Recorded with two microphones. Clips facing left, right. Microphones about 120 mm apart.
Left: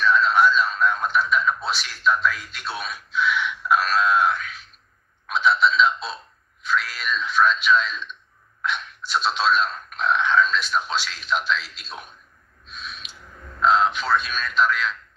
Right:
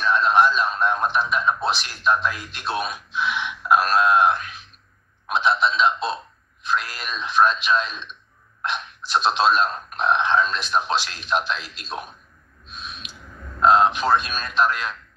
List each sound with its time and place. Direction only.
0.0 s a man's voice: 15° right (ahead or behind)
9.2 s a man's voice: 20° right (ahead or behind)
13.7 s a man's voice: 20° right (ahead or behind)